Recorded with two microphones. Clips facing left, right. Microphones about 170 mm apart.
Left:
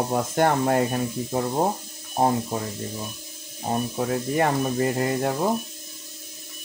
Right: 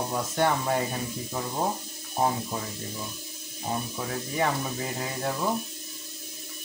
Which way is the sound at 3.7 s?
50° left (ahead or behind).